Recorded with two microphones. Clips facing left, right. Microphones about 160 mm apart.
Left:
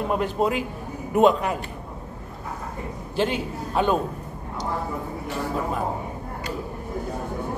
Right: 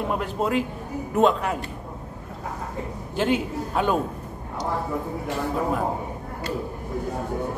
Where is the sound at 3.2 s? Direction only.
5° right (ahead or behind).